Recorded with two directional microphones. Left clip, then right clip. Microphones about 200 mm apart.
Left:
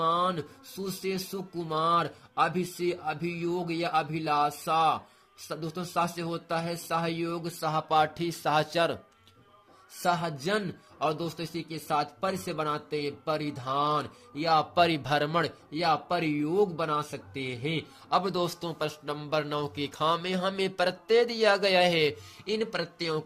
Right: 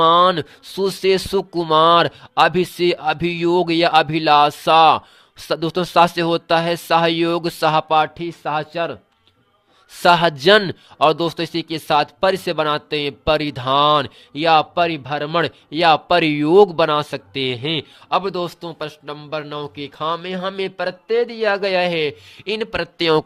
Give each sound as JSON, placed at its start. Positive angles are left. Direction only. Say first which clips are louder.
{"t": 0.0, "sound": "a sound", "louder": "right 14 dB", "side_deg": -45}
{"t": 10.0, "sound": "a sound", "louder": "right 15 dB", "side_deg": -40}
{"t": 11.0, "sound": "speech", "louder": "right 14 dB", "side_deg": -45}
{"t": 14.8, "sound": "a man's voice", "louder": "right 5 dB", "side_deg": -15}
{"t": 15.3, "sound": "speech", "louder": "right 9 dB", "side_deg": -25}
{"t": 18.1, "sound": "a man's voice", "louder": "right 7 dB", "side_deg": -20}
{"t": 22.4, "sound": "speech", "louder": "right 8 dB", "side_deg": -35}